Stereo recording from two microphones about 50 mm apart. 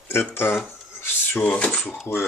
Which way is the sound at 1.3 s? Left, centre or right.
Left.